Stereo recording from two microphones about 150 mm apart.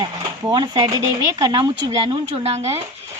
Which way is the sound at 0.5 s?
30° right (ahead or behind).